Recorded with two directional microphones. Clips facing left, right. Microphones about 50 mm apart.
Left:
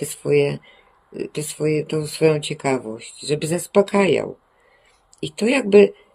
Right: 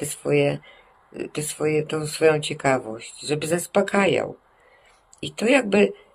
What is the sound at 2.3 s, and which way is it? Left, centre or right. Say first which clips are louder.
Speech: even; centre.